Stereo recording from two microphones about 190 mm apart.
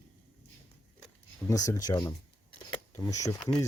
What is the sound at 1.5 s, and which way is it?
Speech, 20° left (ahead or behind).